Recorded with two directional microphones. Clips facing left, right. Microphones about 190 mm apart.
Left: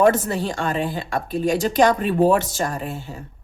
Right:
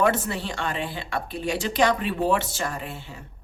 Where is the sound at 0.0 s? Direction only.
40° left (ahead or behind).